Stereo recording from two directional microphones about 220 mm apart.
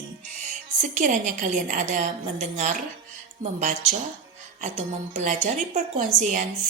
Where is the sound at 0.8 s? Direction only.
35° right (ahead or behind).